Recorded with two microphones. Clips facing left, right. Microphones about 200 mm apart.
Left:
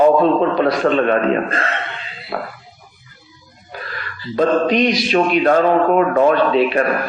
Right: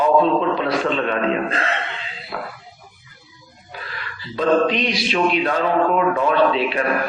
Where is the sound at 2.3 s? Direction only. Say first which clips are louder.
Left 5 dB; 50° left (ahead or behind).